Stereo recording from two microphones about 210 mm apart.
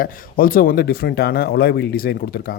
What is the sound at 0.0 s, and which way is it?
Speech, 45° left (ahead or behind).